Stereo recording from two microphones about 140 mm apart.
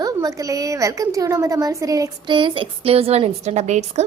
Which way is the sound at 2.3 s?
35° right (ahead or behind).